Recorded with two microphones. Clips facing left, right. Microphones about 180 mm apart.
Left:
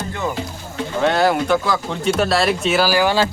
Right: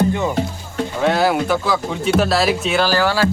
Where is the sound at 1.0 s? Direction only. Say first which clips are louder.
Even; centre (ahead or behind).